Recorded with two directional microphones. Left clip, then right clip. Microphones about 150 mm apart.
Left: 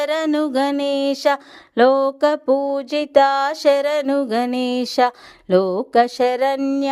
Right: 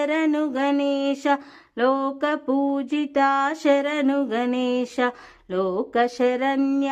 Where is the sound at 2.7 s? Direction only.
35° left (ahead or behind).